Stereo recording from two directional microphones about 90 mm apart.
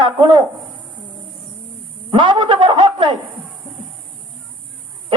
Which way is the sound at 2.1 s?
60° right (ahead or behind).